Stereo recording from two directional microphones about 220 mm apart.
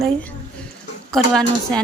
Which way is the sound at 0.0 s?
5° left (ahead or behind).